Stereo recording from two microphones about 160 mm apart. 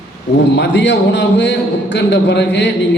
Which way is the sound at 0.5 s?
90° left.